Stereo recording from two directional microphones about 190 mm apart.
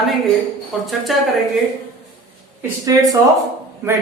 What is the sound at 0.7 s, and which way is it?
Speech, centre (ahead or behind).